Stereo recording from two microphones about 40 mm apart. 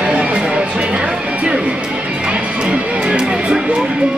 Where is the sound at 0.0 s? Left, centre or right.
Right.